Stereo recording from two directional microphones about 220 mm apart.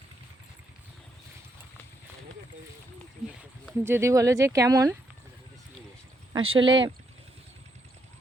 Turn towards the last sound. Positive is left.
turn(degrees=-25)  # may be behind; listen again after turning